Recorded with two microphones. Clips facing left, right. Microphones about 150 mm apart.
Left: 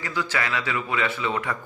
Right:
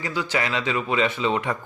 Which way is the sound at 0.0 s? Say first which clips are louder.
Right 2 dB; 15° right (ahead or behind).